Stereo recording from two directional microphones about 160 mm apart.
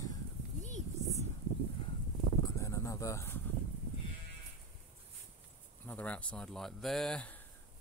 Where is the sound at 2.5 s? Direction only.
20° left (ahead or behind).